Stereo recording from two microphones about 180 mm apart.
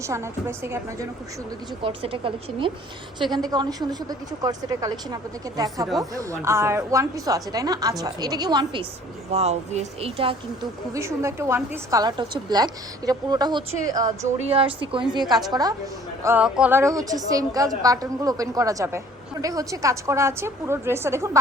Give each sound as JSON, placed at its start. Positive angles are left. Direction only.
{"t": 0.0, "sound": "a woman's voice", "side_deg": -15}
{"t": 1.8, "sound": "a woman's voice", "side_deg": -30}
{"t": 9.3, "sound": "speech", "side_deg": -35}
{"t": 10.9, "sound": "a woman's voice", "side_deg": -15}
{"t": 14.3, "sound": "a woman's voice", "side_deg": -35}
{"t": 16.2, "sound": "a woman's voice", "side_deg": -10}